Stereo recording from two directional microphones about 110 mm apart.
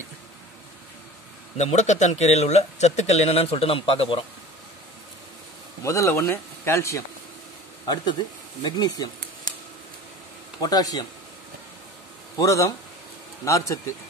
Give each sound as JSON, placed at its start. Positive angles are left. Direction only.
{"t": 1.6, "sound": "speech", "side_deg": 90}
{"t": 5.9, "sound": "speech", "side_deg": 25}
{"t": 7.8, "sound": "speech", "side_deg": 40}
{"t": 10.6, "sound": "speech", "side_deg": 35}
{"t": 12.4, "sound": "speech", "side_deg": 30}